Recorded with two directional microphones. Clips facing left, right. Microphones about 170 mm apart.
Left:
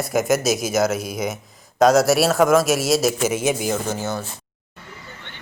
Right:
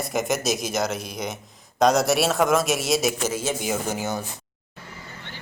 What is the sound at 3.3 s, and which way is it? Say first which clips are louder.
Speech: left 6 dB; 20° left (ahead or behind).